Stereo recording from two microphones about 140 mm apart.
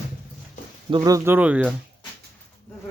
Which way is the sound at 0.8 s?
35° right (ahead or behind).